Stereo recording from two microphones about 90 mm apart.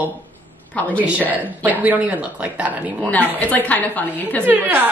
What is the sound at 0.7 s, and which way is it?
Speech, 20° left (ahead or behind).